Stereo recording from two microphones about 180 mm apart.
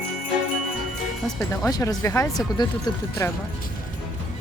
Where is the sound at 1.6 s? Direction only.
20° left (ahead or behind).